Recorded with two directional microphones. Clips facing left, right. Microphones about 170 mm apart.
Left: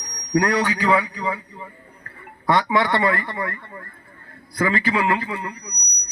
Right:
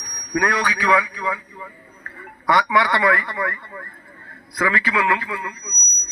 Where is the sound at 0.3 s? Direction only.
25° left (ahead or behind).